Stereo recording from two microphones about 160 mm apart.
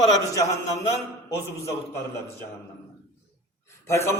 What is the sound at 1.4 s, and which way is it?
Speech, 20° left (ahead or behind).